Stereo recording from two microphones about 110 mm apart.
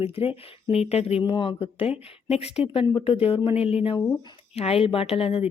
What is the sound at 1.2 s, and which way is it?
Speech, 50° left (ahead or behind).